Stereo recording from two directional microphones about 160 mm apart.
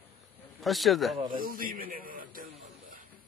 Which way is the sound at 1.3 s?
60° right (ahead or behind).